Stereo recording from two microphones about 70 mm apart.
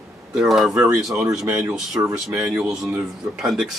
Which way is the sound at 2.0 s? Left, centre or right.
Right.